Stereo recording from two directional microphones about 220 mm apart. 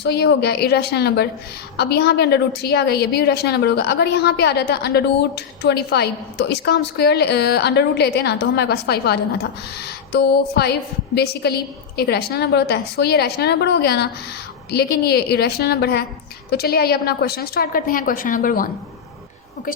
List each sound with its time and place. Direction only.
0.0 s a woman's voice: 50° left (ahead or behind)